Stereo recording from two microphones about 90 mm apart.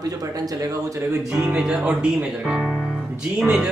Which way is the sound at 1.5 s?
10° right (ahead or behind).